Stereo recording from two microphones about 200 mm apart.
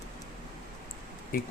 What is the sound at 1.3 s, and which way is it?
Speech, 45° left (ahead or behind).